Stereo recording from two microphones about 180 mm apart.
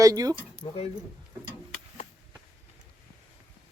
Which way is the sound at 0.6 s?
35° left (ahead or behind).